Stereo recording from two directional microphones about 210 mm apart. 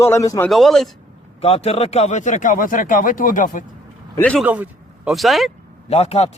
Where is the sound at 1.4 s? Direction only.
30° left (ahead or behind).